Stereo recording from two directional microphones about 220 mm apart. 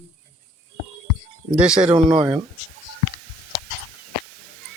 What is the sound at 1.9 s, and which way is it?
Speech, 20° right (ahead or behind).